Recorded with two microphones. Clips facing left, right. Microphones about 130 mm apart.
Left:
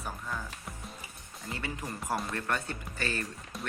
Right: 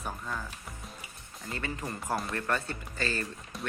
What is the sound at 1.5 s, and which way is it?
Speech, 10° left (ahead or behind).